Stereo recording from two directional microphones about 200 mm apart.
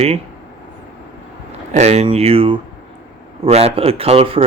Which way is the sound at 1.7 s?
35° right (ahead or behind).